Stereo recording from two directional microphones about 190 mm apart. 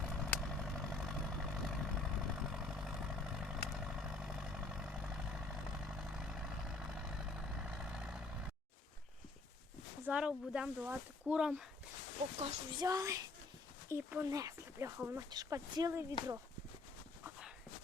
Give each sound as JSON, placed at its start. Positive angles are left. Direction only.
{"t": 0.0, "sound": "vehicle", "side_deg": 5}
{"t": 10.1, "sound": "speech", "side_deg": -5}
{"t": 12.8, "sound": "speech", "side_deg": -15}